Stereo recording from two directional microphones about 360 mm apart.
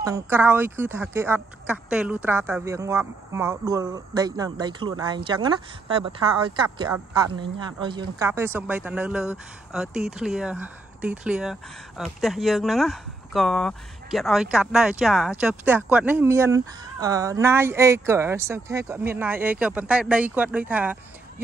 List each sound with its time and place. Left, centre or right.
0.0 s speech: centre